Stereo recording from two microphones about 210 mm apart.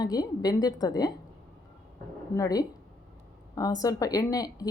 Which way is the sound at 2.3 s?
15° left (ahead or behind).